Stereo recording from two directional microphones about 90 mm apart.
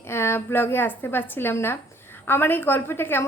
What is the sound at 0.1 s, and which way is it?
A woman's voice, 30° left (ahead or behind).